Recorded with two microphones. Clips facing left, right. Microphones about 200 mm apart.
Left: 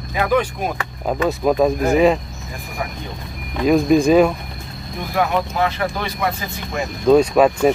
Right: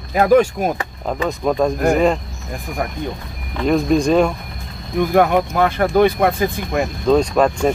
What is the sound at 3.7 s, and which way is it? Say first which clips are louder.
Speech: left 2 dB; 5° left (ahead or behind).